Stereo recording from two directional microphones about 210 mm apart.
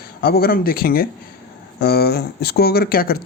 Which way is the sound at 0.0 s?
45° left (ahead or behind).